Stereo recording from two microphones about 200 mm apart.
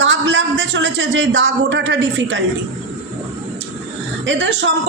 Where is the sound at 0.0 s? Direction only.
65° right (ahead or behind).